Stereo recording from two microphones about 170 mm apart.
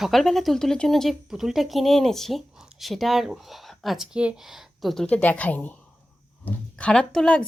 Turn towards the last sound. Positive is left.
turn(degrees=5)  # may be behind; listen again after turning